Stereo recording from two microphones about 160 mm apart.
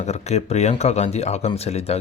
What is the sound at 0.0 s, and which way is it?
Speech, 45° left (ahead or behind).